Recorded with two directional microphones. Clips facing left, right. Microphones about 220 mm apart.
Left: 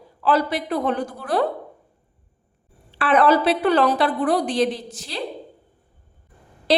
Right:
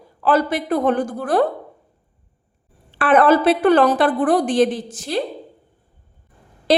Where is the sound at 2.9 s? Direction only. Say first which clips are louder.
Right 3 dB; 50° right (ahead or behind).